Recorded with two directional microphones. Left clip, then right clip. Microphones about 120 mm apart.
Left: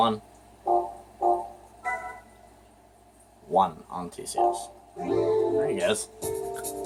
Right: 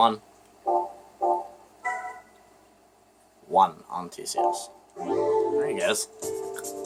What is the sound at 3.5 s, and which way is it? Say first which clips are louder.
Speech: right 2 dB; 45° right (ahead or behind).